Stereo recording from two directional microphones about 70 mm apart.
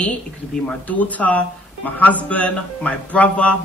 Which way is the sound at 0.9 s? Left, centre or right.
Left.